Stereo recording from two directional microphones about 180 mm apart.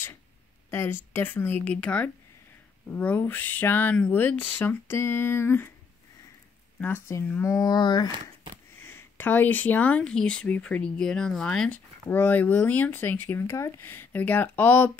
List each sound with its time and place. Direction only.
0.7 s speech: 15° left (ahead or behind)
6.8 s speech: 15° left (ahead or behind)
8.8 s speech: 10° left (ahead or behind)